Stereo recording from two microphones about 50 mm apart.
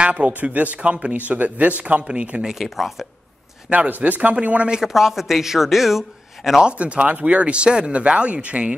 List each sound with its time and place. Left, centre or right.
0.0 s speech: right
0.7 s speech: right
2.6 s a man's voice: centre
3.7 s speech: right
4.6 s a man's voice: centre
6.6 s speech: right